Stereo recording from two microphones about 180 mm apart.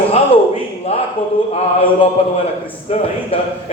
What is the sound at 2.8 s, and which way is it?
Speech, 30° left (ahead or behind).